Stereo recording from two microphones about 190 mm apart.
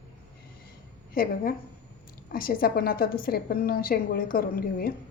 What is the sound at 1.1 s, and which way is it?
A woman's voice, 50° left (ahead or behind).